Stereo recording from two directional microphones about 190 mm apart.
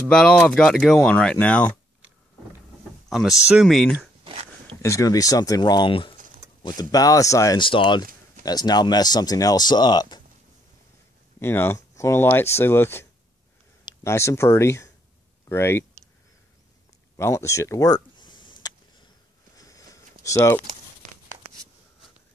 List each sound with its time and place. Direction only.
0.1 s speech: 5° left (ahead or behind)
3.1 s speech: centre (ahead or behind)
4.2 s a sound: 30° right (ahead or behind)
4.6 s speech: 15° left (ahead or behind)
11.3 s speech: 10° left (ahead or behind)
14.0 s speech: 15° left (ahead or behind)
17.2 s a sound: 15° left (ahead or behind)